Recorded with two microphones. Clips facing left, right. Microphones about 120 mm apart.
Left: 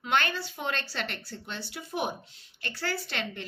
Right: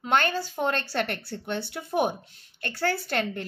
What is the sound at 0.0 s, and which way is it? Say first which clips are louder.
A woman's voice: right 4 dB; 40° right (ahead or behind).